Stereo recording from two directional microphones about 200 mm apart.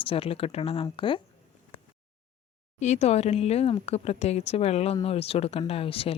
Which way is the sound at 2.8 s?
35° left (ahead or behind).